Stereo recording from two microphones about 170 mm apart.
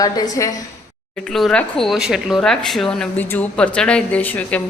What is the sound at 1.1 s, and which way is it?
Speech, 5° left (ahead or behind).